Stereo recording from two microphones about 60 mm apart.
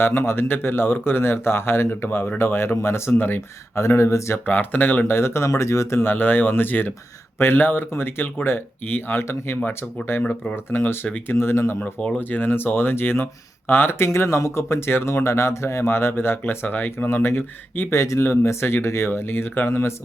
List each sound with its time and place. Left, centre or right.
0.0 s speech: left
3.8 s speech: left
4.4 s speech: left
5.5 s speech: left
6.0 s speech: left
11.0 s speech: left
11.3 s speech: left
11.9 s speech: centre
12.2 s speech: left